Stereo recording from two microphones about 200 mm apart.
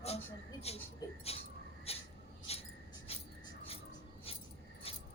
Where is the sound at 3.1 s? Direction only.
30° left (ahead or behind).